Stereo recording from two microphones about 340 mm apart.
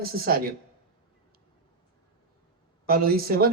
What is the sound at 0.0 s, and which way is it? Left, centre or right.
Speech, right.